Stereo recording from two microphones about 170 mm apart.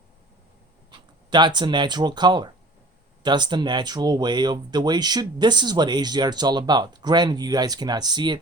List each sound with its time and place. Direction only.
0.9 s speech: 25° right (ahead or behind)